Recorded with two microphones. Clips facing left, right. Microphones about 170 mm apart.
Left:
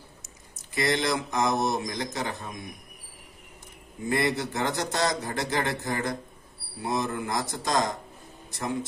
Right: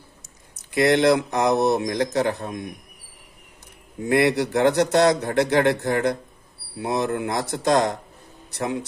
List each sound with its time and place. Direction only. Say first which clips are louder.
0.5 s speech: right 8 dB; 65° right (ahead or behind)
4.0 s a man's voice: right 7 dB; 70° right (ahead or behind)